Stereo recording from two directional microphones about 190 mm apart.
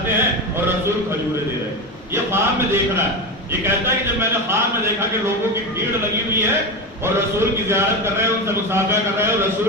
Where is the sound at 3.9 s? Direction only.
15° right (ahead or behind).